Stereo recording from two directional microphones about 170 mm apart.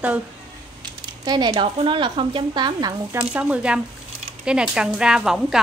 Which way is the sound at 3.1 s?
10° right (ahead or behind).